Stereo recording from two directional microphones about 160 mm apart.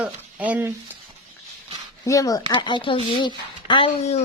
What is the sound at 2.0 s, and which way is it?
Speech, 20° left (ahead or behind).